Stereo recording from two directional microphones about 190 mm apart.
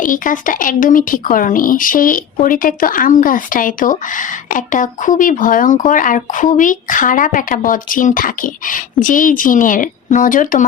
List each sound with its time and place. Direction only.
0.0 s speech: 45° left (ahead or behind)